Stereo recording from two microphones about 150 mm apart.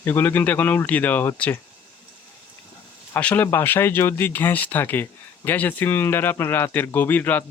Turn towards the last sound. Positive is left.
turn(degrees=10)  # may be behind; listen again after turning